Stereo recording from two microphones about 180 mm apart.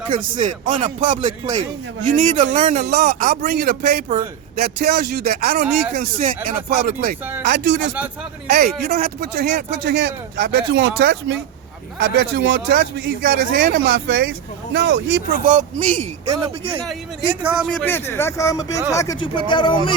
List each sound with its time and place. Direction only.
0.1 s speech: 45° right (ahead or behind)
6.0 s speech: 50° right (ahead or behind)
7.4 s speech: 80° right
8.4 s speech: 60° right (ahead or behind); by 12.5 s 75° right (ahead or behind)
12.5 s speech: 55° right (ahead or behind); by 15.2 s 90° right
15.4 s speech: 45° right (ahead or behind)
16.8 s speech: 5° right (ahead or behind); by 19.1 s 15° left (ahead or behind)
19.2 s speech: 25° left (ahead or behind)